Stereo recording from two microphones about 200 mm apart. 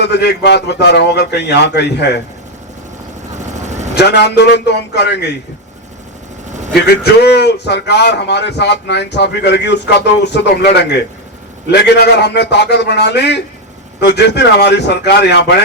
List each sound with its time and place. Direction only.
0.0 s speech: 55° left (ahead or behind)
3.3 s vehicle: 35° right (ahead or behind)
3.9 s speech: 55° left (ahead or behind)
6.8 s speech: 55° left (ahead or behind)